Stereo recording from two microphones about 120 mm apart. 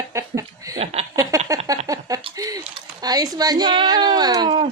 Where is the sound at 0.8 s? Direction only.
60° right (ahead or behind).